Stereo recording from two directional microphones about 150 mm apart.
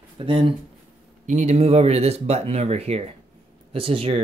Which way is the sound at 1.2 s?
50° right (ahead or behind).